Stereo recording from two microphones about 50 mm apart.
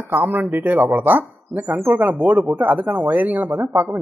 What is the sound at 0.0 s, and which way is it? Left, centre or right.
Speech, right.